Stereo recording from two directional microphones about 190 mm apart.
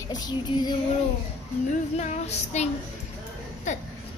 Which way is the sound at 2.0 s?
35° left (ahead or behind).